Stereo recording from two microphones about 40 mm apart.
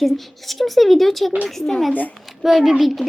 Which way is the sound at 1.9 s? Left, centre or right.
Left.